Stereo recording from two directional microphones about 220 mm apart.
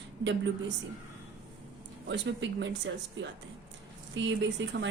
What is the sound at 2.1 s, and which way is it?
A woman's voice, 55° right (ahead or behind).